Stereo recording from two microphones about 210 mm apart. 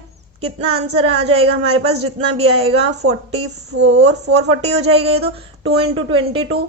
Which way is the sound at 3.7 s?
55° right (ahead or behind).